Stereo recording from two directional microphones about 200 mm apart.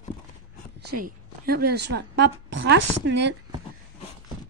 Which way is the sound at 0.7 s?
50° right (ahead or behind).